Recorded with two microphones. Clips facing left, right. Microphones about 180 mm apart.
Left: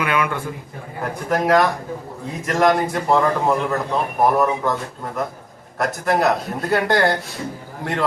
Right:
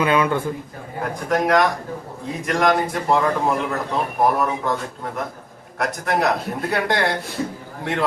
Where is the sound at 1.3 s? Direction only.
Centre (ahead or behind).